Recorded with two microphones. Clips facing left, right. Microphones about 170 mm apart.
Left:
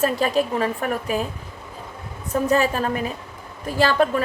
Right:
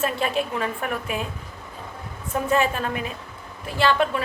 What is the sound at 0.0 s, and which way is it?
A woman's voice, 40° left (ahead or behind).